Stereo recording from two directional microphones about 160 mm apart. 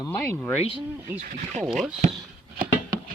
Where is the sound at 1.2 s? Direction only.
55° right (ahead or behind).